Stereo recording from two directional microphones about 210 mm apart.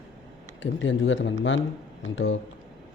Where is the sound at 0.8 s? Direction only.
65° left (ahead or behind).